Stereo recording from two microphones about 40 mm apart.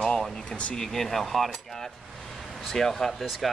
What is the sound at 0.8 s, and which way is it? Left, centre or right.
Speech, centre.